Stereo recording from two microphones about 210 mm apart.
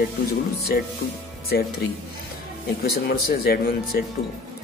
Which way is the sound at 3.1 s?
45° left (ahead or behind).